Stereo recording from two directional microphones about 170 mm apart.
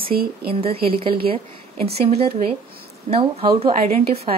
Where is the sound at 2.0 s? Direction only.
35° right (ahead or behind).